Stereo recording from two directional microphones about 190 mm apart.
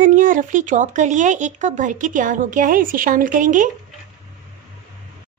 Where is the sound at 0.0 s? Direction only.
45° right (ahead or behind).